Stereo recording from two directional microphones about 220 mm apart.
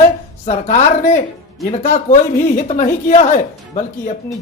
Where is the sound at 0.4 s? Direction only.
35° left (ahead or behind).